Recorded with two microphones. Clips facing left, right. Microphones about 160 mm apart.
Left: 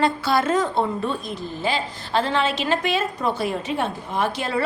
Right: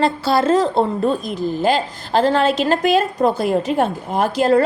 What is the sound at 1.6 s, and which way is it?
A woman's voice, 45° right (ahead or behind).